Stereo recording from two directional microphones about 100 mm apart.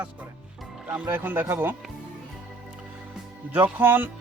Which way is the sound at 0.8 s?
20° right (ahead or behind).